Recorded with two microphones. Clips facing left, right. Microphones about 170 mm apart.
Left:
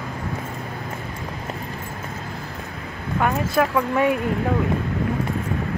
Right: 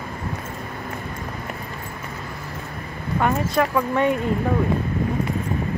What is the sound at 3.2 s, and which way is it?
Speech, 5° left (ahead or behind).